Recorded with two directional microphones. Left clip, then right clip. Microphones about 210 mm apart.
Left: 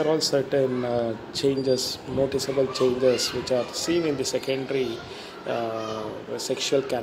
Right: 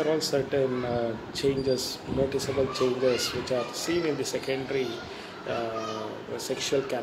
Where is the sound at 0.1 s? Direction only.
30° left (ahead or behind).